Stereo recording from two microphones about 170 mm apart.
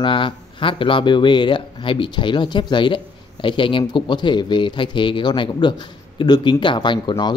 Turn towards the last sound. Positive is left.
turn(degrees=25)  # may be behind; listen again after turning